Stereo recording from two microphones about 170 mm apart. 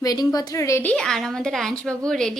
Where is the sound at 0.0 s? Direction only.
20° left (ahead or behind).